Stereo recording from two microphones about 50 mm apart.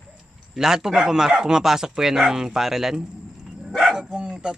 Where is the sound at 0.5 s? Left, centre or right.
Centre.